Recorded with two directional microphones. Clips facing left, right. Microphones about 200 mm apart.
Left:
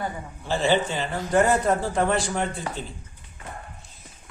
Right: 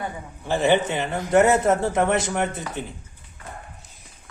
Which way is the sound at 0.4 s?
20° right (ahead or behind).